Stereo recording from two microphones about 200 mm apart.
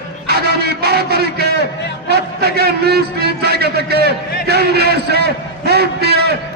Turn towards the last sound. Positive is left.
turn(degrees=-55)  # may be behind; listen again after turning